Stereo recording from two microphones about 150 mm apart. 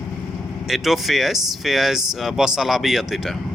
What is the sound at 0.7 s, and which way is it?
Speech, centre (ahead or behind).